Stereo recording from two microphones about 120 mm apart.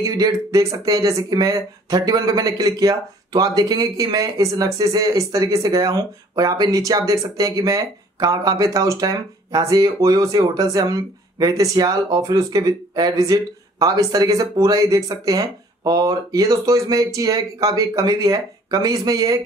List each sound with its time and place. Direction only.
0.0 s speech: 30° right (ahead or behind)